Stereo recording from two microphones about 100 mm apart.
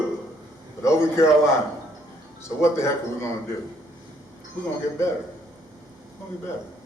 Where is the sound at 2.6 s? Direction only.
25° left (ahead or behind).